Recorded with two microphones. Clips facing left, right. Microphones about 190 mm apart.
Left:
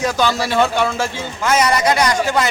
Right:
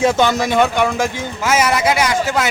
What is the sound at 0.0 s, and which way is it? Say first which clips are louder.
A man's voice: right 3 dB; 25° right (ahead or behind).